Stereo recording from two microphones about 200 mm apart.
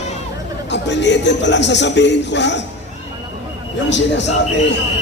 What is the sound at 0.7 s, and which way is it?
Speech, 60° left (ahead or behind).